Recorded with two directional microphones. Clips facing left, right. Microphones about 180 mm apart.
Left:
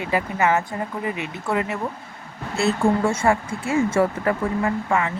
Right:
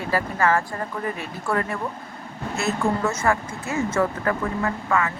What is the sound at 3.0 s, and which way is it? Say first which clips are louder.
Speech: left 3 dB; 30° left (ahead or behind).